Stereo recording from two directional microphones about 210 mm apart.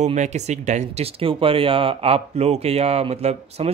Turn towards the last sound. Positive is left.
turn(degrees=-30)  # may be behind; listen again after turning